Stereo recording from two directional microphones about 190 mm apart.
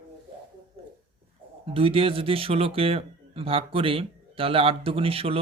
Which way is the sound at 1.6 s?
30° right (ahead or behind).